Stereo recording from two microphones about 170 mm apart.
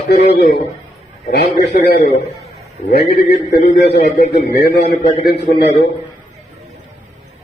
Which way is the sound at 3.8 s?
75° left (ahead or behind).